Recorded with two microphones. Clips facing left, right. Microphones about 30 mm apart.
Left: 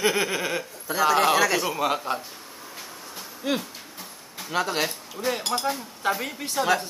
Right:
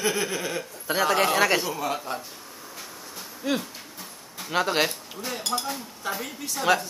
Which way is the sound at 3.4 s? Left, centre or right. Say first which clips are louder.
Even; centre.